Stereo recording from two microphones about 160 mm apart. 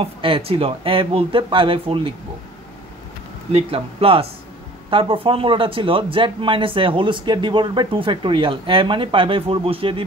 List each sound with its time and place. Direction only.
0.0 s speech: 35° right (ahead or behind)
3.5 s speech: 35° right (ahead or behind)